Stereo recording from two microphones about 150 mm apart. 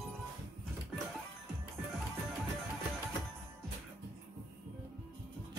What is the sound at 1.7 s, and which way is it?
Music, centre (ahead or behind).